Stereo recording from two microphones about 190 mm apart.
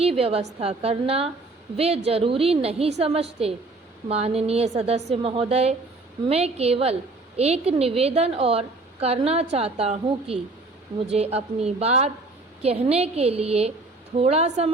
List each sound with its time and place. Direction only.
0.0 s a woman's voice: 30° right (ahead or behind)